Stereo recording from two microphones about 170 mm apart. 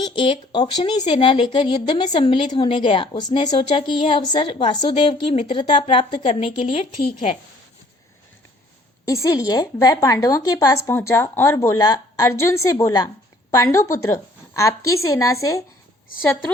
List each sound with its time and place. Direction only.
0.0 s a woman's voice: 30° left (ahead or behind)
9.0 s a woman's voice: 20° left (ahead or behind)